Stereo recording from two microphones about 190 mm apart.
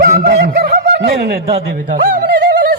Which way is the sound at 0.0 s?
50° right (ahead or behind).